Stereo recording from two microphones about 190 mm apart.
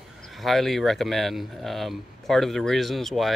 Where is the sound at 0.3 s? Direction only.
Centre (ahead or behind).